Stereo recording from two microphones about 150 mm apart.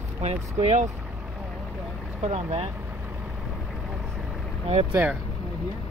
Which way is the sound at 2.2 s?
45° right (ahead or behind).